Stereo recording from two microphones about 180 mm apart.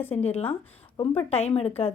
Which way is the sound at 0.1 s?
35° left (ahead or behind).